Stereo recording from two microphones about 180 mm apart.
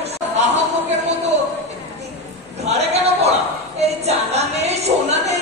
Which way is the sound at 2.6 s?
35° right (ahead or behind).